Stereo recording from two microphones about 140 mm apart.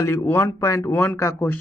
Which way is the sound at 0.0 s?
20° left (ahead or behind).